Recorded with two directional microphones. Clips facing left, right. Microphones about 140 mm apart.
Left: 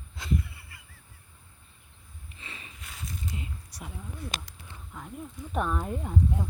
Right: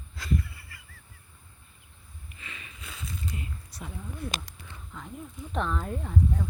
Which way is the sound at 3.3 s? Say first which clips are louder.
Even; 15° left (ahead or behind).